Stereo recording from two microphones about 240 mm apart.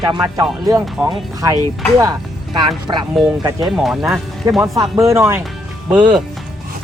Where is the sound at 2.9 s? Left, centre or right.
Centre.